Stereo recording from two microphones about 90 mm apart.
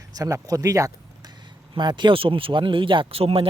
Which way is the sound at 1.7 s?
55° right (ahead or behind).